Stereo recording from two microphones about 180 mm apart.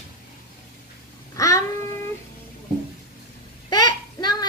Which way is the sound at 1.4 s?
20° left (ahead or behind).